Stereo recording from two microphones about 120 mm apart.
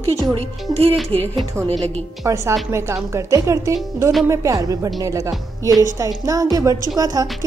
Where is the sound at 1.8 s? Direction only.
25° right (ahead or behind).